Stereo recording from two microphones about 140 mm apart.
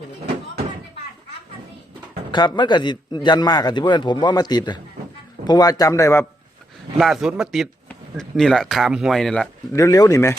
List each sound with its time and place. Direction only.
2.3 s a man's voice: 35° left (ahead or behind)
7.0 s speech: 5° right (ahead or behind)
9.7 s speech: 25° left (ahead or behind)